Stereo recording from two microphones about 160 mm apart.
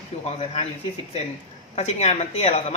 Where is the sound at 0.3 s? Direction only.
40° left (ahead or behind).